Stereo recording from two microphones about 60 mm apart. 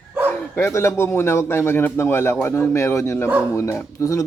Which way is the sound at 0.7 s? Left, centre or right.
Left.